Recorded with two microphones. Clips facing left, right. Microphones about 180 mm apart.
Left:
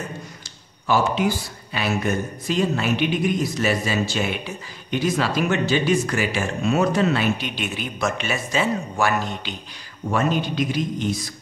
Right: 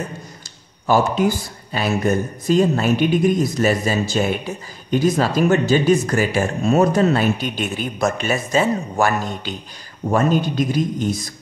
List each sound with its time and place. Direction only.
0.8 s speech: 45° right (ahead or behind)